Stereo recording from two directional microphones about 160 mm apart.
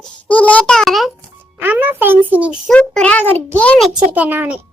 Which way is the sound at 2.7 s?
5° left (ahead or behind).